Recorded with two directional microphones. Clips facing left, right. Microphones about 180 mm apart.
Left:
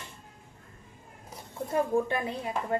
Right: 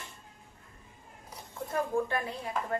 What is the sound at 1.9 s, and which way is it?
Speech, 20° left (ahead or behind).